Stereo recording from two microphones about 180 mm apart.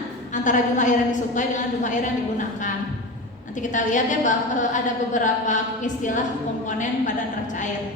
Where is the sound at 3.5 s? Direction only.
45° left (ahead or behind).